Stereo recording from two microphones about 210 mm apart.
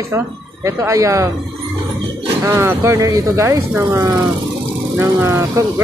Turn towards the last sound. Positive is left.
turn(degrees=-15)  # may be behind; listen again after turning